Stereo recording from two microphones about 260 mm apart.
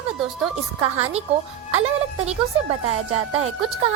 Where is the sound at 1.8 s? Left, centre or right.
Right.